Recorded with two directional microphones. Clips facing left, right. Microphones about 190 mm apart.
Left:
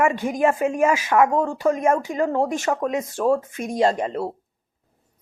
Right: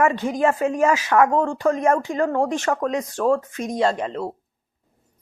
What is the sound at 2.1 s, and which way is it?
Speech, 20° left (ahead or behind).